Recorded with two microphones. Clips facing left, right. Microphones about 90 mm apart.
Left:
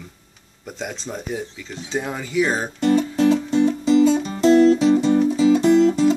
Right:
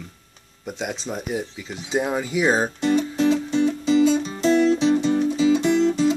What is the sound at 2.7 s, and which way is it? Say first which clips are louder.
Music: left 2 dB; 45° left (ahead or behind).